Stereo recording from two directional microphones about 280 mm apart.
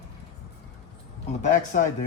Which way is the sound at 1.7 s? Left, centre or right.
Left.